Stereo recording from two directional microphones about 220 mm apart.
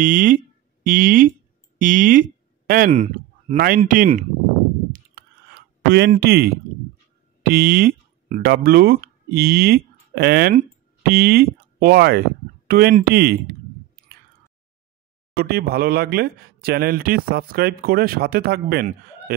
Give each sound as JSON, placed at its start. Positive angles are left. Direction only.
{"t": 0.0, "sound": "speech", "side_deg": -40}
{"t": 2.9, "sound": "speech", "side_deg": -30}
{"t": 4.9, "sound": "clicking", "side_deg": -45}
{"t": 7.4, "sound": "speech", "side_deg": -40}
{"t": 15.3, "sound": "speech", "side_deg": -45}